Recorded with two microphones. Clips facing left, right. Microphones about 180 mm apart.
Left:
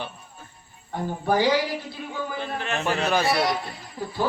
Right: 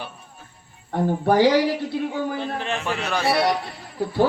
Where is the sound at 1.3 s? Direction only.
65° right (ahead or behind).